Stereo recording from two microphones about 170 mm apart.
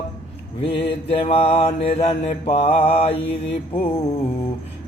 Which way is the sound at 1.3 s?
35° left (ahead or behind).